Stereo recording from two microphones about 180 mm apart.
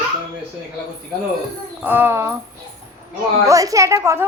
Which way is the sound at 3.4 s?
20° right (ahead or behind).